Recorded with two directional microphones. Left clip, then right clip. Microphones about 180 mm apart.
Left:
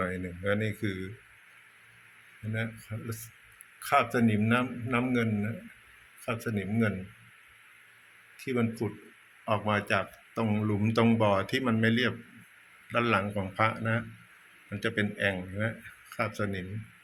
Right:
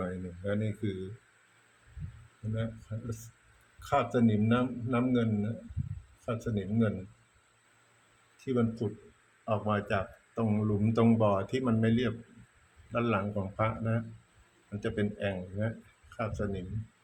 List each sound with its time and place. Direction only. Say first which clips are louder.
0.0 s speech: left 5 dB; 15° left (ahead or behind)
3.8 s speech: left 3 dB; 15° left (ahead or behind)
8.4 s speech: even; 10° left (ahead or behind)